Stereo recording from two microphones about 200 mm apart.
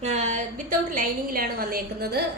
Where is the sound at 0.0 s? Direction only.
35° right (ahead or behind).